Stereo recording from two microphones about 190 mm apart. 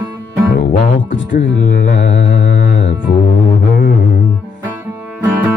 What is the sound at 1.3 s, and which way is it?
Speech, 50° left (ahead or behind).